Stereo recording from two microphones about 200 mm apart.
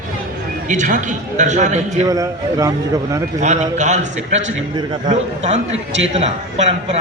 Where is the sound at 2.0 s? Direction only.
15° right (ahead or behind).